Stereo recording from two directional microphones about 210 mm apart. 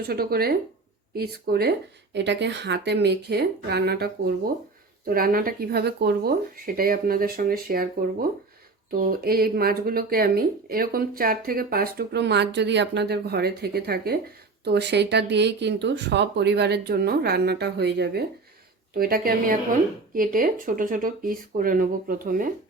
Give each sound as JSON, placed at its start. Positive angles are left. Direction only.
{"t": 0.1, "sound": "speech", "side_deg": -45}